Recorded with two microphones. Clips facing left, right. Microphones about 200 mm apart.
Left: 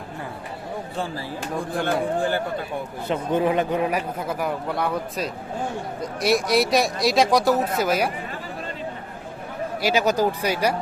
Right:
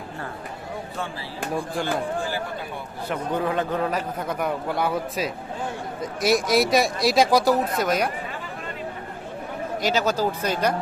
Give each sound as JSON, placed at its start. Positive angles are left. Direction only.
{"t": 1.7, "sound": "a man's voice", "side_deg": 60}
{"t": 3.1, "sound": "a man's voice", "side_deg": 20}
{"t": 9.8, "sound": "a man's voice", "side_deg": 15}